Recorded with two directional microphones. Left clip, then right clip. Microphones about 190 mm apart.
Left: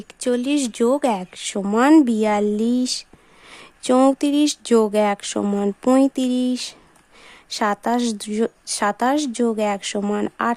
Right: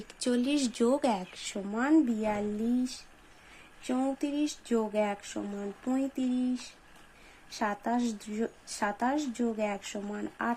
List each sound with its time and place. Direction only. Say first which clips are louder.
0.2 s speech: left 9 dB; 30° left (ahead or behind)
1.5 s speech: left 13 dB; 45° left (ahead or behind)
3.8 s speech: left 16 dB; 45° left (ahead or behind)
7.6 s speech: left 11 dB; 40° left (ahead or behind)